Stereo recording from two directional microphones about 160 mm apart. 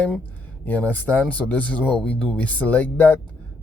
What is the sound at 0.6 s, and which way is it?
Speech, 10° left (ahead or behind).